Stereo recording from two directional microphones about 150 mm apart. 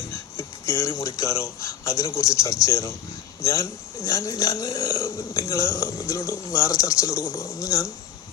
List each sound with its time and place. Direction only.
0.1 s speech: 20° left (ahead or behind)